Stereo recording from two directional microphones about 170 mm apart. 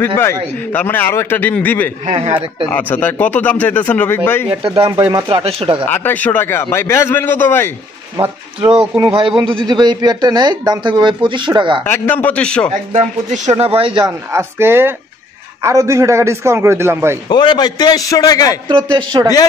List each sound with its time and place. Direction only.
0.0 s a man's voice: 15° left (ahead or behind)
2.0 s a man's voice: 35° right (ahead or behind)
2.7 s a man's voice: 10° left (ahead or behind)
4.6 s a man's voice: 30° right (ahead or behind)
5.9 s a man's voice: 10° left (ahead or behind)
8.2 s speech: 35° right (ahead or behind)
11.8 s a man's voice: 10° left (ahead or behind)
12.9 s a man's voice: 40° right (ahead or behind)
14.3 s a man's voice: 15° right (ahead or behind)
17.3 s a man's voice: 25° left (ahead or behind)
18.7 s speech: 25° right (ahead or behind)